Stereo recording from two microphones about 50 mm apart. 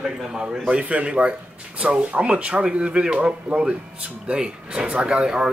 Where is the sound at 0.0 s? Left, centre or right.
Centre.